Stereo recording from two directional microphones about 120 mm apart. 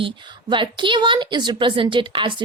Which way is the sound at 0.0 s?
40° right (ahead or behind).